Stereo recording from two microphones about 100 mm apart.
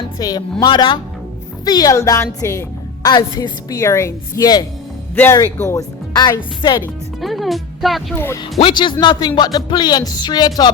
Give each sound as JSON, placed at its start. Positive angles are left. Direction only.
{"t": 0.2, "sound": "a woman's voice", "side_deg": 40}
{"t": 1.6, "sound": "a woman's voice", "side_deg": 40}
{"t": 5.1, "sound": "speech", "side_deg": 20}
{"t": 5.4, "sound": "speech", "side_deg": 40}
{"t": 7.2, "sound": "speech", "side_deg": 0}
{"t": 8.1, "sound": "speech", "side_deg": 20}
{"t": 8.7, "sound": "speech", "side_deg": 50}